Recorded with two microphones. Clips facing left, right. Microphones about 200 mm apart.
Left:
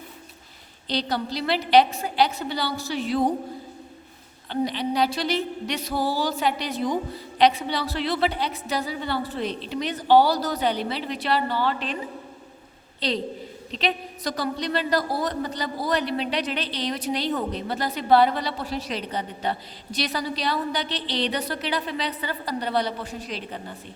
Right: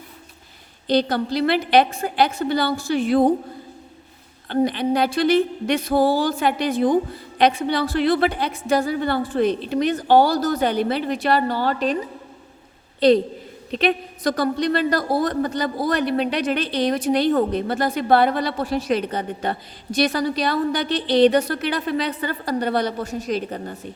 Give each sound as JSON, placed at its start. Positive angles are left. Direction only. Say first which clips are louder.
{"t": 0.9, "sound": "a woman's voice", "louder": "right 7 dB", "side_deg": -50}
{"t": 4.4, "sound": "a woman's voice", "louder": "right 6 dB", "side_deg": -55}
{"t": 13.0, "sound": "a woman's voice", "louder": "right 12 dB", "side_deg": -50}